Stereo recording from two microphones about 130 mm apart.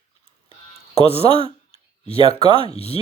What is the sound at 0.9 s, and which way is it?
Speech, 50° left (ahead or behind).